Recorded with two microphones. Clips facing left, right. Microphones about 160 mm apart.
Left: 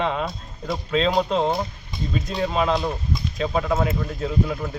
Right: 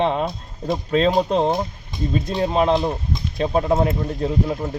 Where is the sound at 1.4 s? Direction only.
20° right (ahead or behind).